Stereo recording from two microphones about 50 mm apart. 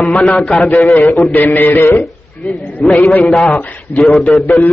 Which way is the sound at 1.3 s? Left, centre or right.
Left.